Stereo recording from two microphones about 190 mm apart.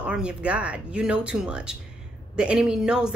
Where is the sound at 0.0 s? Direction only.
5° right (ahead or behind).